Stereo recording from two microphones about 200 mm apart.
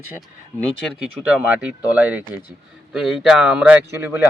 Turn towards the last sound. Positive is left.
turn(degrees=-10)  # may be behind; listen again after turning